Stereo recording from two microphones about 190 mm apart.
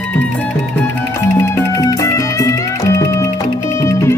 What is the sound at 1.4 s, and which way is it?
Music, 15° left (ahead or behind).